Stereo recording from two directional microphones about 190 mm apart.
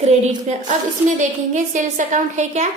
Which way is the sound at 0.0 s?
35° right (ahead or behind).